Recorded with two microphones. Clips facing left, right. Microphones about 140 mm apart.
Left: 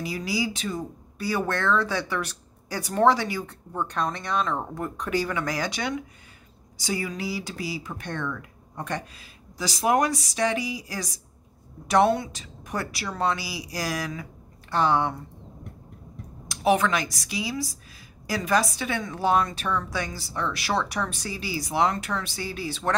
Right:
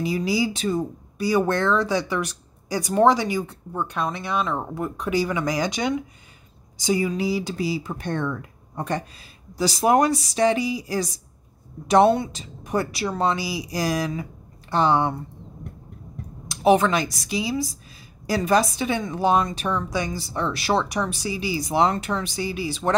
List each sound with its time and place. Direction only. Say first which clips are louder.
0.0 s speech: right 5 dB; 20° right (ahead or behind)
1.1 s speech: right 6 dB; 15° right (ahead or behind)
16.4 s speech: right 4 dB; 25° right (ahead or behind)
20.9 s speech: right 4 dB; 15° right (ahead or behind)